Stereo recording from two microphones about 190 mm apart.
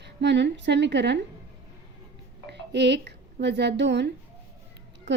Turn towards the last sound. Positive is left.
turn(degrees=-65)  # may be behind; listen again after turning